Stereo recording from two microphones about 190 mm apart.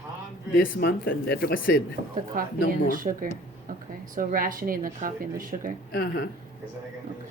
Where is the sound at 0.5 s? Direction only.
50° left (ahead or behind).